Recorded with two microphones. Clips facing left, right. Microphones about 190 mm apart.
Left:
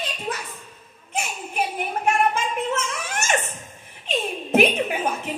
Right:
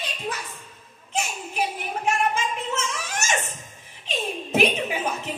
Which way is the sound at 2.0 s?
55° left (ahead or behind).